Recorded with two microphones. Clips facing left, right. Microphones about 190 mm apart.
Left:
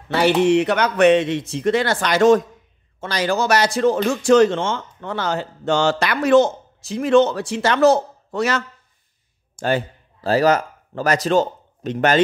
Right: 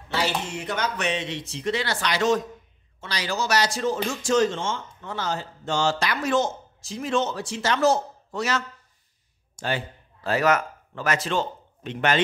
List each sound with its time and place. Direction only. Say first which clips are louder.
0.1 s speech: left 12 dB; 60° left (ahead or behind)
9.6 s a man's voice: left 8 dB; 45° left (ahead or behind)